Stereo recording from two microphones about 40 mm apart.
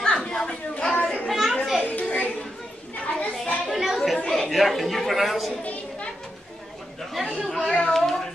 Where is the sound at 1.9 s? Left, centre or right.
Left.